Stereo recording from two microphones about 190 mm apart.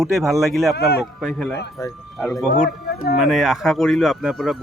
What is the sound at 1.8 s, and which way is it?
Speech, 15° left (ahead or behind).